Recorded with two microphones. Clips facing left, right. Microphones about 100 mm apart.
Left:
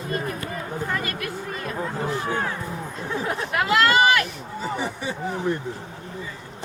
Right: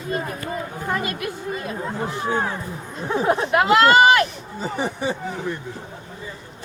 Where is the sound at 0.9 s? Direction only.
20° right (ahead or behind).